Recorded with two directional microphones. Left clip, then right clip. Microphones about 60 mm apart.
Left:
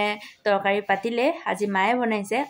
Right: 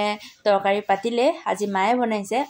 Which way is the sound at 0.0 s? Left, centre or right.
Centre.